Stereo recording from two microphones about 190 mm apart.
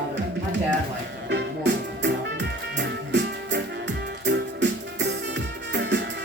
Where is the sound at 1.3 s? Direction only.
65° right (ahead or behind).